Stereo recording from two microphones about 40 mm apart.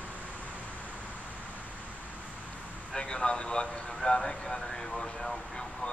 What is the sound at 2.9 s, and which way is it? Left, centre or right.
Speech, left.